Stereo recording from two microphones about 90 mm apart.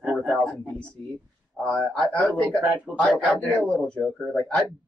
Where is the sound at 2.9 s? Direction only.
10° right (ahead or behind).